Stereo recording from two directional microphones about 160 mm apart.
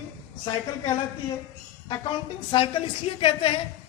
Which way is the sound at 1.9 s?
30° left (ahead or behind).